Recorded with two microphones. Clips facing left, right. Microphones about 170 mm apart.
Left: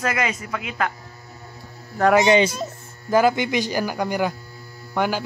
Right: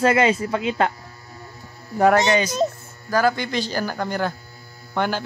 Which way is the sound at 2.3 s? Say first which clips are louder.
Left 2 dB; 25° left (ahead or behind).